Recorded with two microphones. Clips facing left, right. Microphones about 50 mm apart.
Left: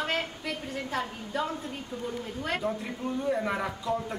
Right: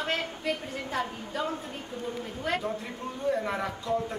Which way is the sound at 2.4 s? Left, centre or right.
Centre.